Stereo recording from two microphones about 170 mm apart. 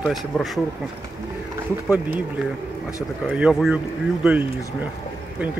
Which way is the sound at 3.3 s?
5° right (ahead or behind).